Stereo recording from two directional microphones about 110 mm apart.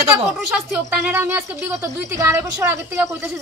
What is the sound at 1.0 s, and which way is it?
A woman's voice, 15° right (ahead or behind).